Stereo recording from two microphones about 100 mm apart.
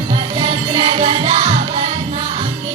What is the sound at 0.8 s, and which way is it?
Music, 85° right.